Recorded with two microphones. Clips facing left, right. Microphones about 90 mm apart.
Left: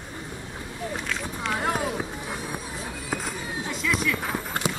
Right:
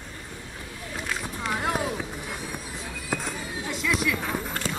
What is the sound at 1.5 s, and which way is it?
Run, 5° left (ahead or behind).